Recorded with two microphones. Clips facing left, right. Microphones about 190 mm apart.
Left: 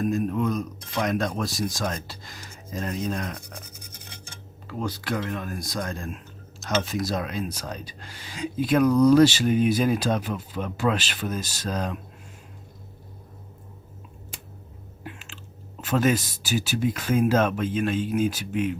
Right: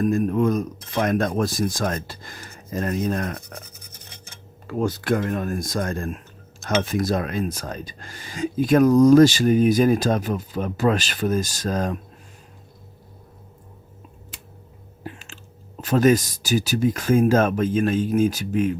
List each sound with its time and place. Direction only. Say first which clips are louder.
0.0 s speech: right 5 dB; 50° right (ahead or behind)
4.6 s speech: right 7 dB; 50° right (ahead or behind)
15.0 s a sound: right 4 dB; 40° right (ahead or behind)
15.8 s speech: right 5 dB; 40° right (ahead or behind)